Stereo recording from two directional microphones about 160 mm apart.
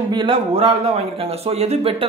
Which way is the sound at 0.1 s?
30° right (ahead or behind).